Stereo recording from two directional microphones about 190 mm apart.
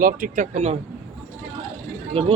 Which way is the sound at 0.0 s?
45° right (ahead or behind).